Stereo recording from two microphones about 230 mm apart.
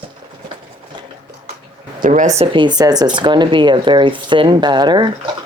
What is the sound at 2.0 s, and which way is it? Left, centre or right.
Speech, right.